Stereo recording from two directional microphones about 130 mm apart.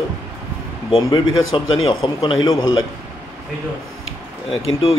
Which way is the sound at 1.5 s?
40° left (ahead or behind).